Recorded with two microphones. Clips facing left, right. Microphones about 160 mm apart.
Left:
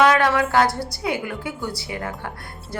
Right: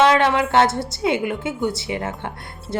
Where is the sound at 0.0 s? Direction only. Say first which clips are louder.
Right 1 dB; 25° right (ahead or behind).